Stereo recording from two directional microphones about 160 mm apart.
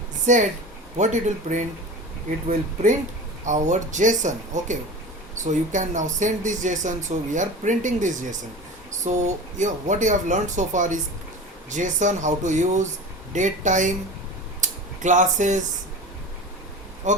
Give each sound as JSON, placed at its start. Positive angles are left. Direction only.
{"t": 0.3, "sound": "speech", "side_deg": -50}
{"t": 3.4, "sound": "speech", "side_deg": -50}
{"t": 14.6, "sound": "a sound", "side_deg": -50}
{"t": 17.0, "sound": "speech", "side_deg": -50}